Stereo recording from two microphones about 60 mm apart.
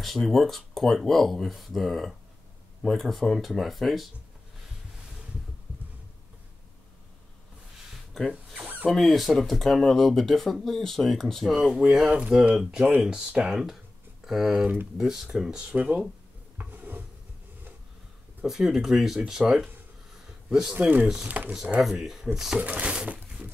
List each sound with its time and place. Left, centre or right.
0.0 s speech: centre
7.9 s a sound: centre
8.6 s a sound: right
8.9 s speech: centre
16.5 s a sound: right
18.4 s speech: centre
20.7 s speech: right
21.8 s speech: centre
22.6 s speech: right
23.0 s crumpling: right